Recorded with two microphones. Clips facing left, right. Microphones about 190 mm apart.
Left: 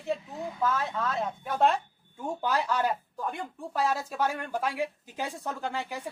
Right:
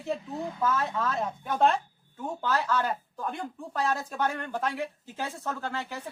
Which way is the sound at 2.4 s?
15° left (ahead or behind).